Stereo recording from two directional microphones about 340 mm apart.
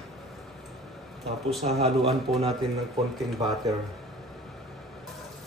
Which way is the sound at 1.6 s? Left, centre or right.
Centre.